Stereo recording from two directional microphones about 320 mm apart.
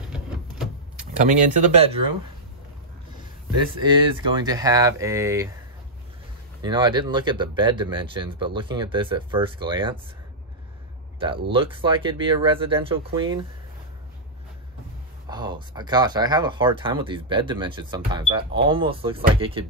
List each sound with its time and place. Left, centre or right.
1.2 s speech: right
3.8 s speech: centre
6.6 s speech: centre
11.5 s speech: centre
15.2 s speech: centre